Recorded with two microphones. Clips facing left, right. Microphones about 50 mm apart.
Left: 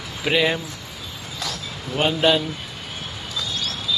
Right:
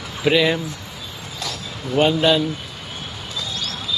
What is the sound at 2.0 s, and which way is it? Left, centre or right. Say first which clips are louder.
Speech: right 3 dB; centre.